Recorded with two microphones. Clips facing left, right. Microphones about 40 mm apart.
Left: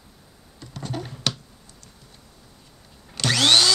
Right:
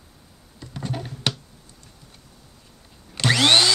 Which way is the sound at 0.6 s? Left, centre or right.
Centre.